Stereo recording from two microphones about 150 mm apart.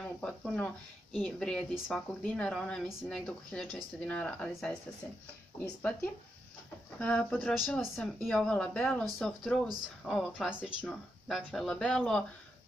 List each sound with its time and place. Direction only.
0.0 s speech: 5° left (ahead or behind)
7.0 s speech: 5° left (ahead or behind)